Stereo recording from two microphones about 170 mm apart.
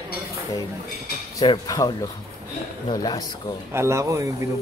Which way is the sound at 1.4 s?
20° left (ahead or behind).